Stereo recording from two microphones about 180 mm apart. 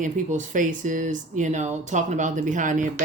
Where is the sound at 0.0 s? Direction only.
45° right (ahead or behind).